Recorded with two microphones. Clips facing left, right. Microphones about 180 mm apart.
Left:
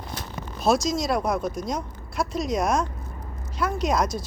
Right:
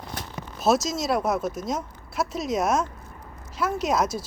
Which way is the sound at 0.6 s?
5° right (ahead or behind).